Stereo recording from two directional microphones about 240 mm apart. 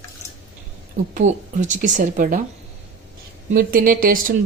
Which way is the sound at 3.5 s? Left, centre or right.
Right.